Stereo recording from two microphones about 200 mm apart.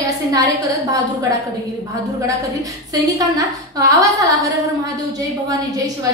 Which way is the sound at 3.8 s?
15° right (ahead or behind).